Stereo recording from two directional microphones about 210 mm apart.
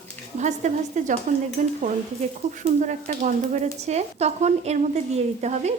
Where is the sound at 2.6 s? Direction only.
35° right (ahead or behind).